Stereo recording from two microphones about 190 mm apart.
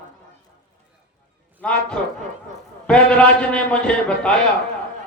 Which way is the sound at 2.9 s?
5° left (ahead or behind).